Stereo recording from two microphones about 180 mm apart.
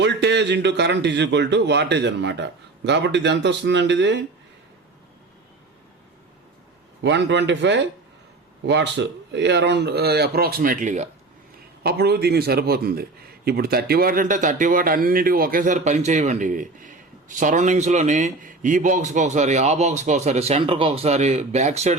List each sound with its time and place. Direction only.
0.0 s a man's voice: 75° right (ahead or behind)
7.0 s speech: 80° right; by 11.1 s 40° right (ahead or behind)
11.8 s a man's voice: 60° right (ahead or behind); by 21.9 s 35° right (ahead or behind)